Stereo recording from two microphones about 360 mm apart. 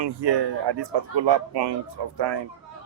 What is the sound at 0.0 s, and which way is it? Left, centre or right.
Speech, right.